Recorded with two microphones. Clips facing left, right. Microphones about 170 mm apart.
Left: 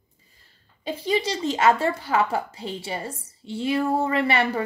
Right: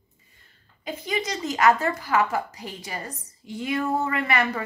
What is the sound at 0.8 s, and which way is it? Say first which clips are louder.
Speech: left 4 dB; 30° left (ahead or behind).